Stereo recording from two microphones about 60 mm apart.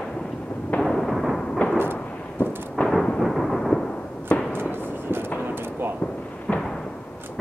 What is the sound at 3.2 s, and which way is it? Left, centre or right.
Thunder, centre.